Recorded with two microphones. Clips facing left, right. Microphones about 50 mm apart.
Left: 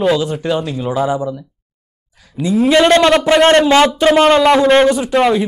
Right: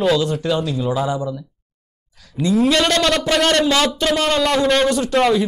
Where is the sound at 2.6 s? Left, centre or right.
Left.